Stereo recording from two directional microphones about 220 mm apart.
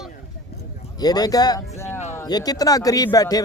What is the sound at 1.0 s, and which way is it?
A man's voice, 15° left (ahead or behind).